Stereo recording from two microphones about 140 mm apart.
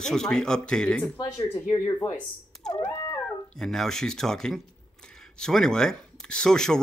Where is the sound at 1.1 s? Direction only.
20° left (ahead or behind).